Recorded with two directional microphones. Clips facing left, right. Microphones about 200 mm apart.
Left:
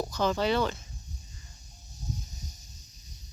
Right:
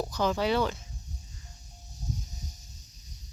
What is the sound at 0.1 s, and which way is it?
Speech, 10° right (ahead or behind).